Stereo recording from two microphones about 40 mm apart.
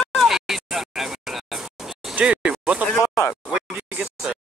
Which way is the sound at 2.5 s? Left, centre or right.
Right.